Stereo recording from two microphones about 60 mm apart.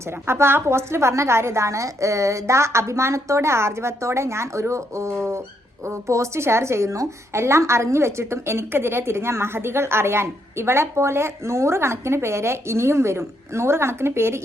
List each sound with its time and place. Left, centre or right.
0.3 s a woman's voice: right